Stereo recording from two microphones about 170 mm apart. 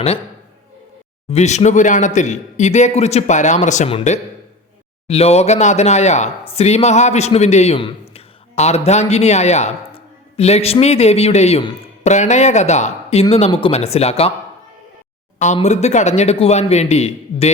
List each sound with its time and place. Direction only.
1.3 s speech: 40° left (ahead or behind)
15.5 s speech: 40° left (ahead or behind)